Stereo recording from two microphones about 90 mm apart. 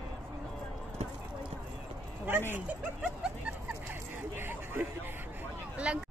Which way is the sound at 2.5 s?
15° right (ahead or behind).